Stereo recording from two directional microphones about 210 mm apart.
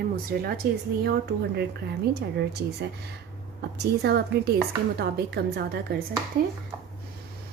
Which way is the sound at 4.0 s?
50° right (ahead or behind).